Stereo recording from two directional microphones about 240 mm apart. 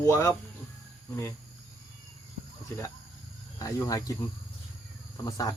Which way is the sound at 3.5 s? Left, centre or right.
Centre.